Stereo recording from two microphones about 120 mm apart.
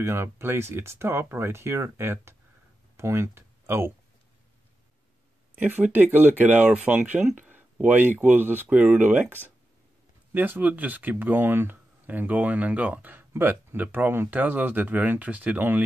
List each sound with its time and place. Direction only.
0.0 s speech: 20° right (ahead or behind)
5.6 s speech: 15° right (ahead or behind)